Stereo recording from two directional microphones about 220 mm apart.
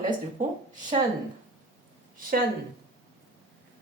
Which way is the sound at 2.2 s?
40° right (ahead or behind).